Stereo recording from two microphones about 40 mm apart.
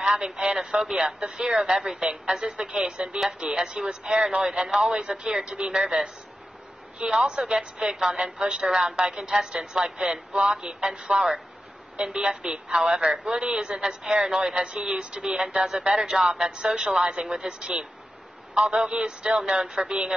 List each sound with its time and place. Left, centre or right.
0.0 s speech: centre
0.7 s speech: centre
0.9 s speech: centre
2.7 s a woman's voice: right
7.0 s a woman's voice: centre
10.0 s a woman's voice: right
11.1 s a woman's voice: centre